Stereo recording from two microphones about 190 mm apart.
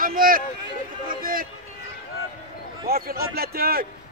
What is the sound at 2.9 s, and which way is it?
A man's voice, 50° right (ahead or behind).